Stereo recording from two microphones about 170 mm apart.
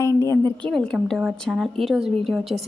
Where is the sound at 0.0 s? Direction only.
15° left (ahead or behind).